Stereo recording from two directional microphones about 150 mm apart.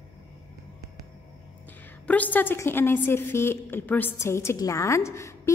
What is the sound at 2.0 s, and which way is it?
A woman's voice, 10° left (ahead or behind).